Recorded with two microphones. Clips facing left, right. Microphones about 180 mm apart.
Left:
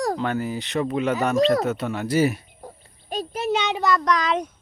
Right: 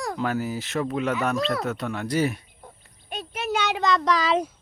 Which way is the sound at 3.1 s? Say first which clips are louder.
Left 5 dB; 35° left (ahead or behind).